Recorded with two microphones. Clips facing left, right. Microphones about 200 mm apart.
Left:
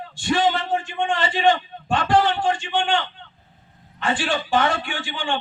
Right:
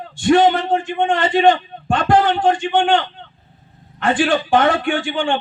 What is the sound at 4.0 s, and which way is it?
A man's voice, 55° right (ahead or behind).